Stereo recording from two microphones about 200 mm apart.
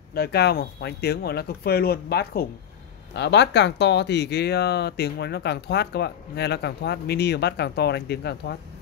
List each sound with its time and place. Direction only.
0.1 s speech: 55° left (ahead or behind)